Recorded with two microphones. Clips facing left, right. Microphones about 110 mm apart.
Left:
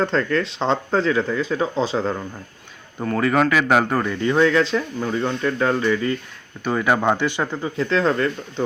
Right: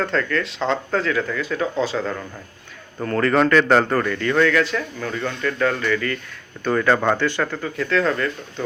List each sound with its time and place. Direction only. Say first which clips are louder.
0.0 s speech: left 2 dB; 30° left (ahead or behind)
3.0 s speech: right 1 dB; 5° left (ahead or behind); by 8.6 s 30° left (ahead or behind)